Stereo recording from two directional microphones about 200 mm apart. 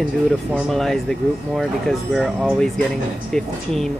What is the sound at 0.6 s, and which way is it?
Speech, centre (ahead or behind).